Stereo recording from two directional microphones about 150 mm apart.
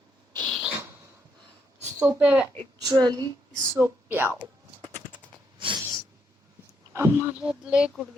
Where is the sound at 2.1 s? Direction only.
10° right (ahead or behind).